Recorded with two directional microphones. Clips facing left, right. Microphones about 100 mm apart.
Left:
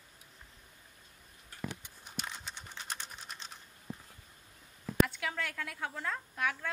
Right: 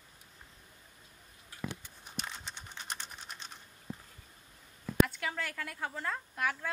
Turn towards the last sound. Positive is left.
turn(degrees=0)  # may be behind; listen again after turning